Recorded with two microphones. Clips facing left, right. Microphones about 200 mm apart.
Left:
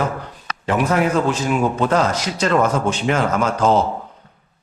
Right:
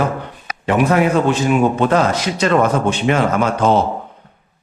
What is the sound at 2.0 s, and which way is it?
Speech, 60° right (ahead or behind).